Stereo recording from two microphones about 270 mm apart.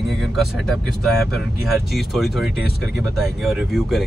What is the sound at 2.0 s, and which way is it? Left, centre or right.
Speech, centre.